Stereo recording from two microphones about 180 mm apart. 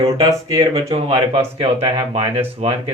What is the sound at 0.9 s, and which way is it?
Speech, 30° right (ahead or behind).